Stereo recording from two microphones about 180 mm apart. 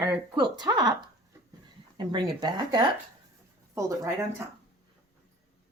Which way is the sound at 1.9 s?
25° right (ahead or behind).